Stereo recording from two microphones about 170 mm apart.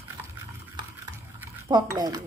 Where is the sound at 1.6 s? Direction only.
25° right (ahead or behind).